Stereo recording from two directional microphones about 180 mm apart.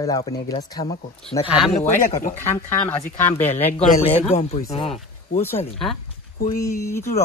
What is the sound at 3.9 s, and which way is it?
A man's voice, 35° left (ahead or behind).